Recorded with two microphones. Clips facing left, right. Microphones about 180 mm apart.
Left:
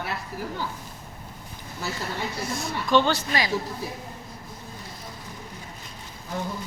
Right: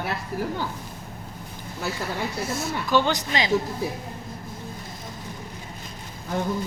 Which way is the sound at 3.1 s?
20° right (ahead or behind).